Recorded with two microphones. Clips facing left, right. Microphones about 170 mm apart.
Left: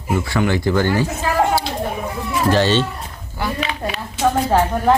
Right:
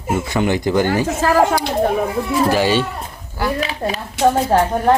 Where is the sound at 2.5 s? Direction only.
10° right (ahead or behind).